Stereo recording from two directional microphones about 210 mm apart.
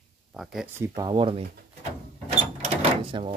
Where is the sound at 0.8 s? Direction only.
20° right (ahead or behind).